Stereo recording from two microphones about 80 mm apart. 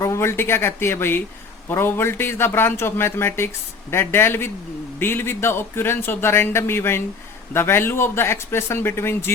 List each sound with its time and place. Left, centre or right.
0.0 s a man's voice: left